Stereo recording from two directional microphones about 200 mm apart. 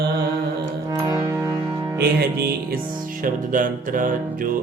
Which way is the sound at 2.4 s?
45° right (ahead or behind).